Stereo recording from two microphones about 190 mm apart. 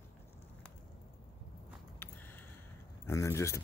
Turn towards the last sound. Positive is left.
turn(degrees=15)  # may be behind; listen again after turning